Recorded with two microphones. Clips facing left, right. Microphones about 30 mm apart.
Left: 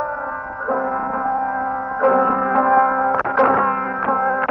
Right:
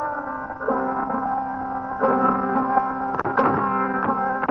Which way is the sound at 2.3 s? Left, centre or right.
Left.